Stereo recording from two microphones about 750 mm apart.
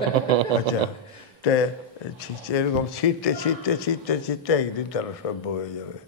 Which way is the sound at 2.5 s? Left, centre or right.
Left.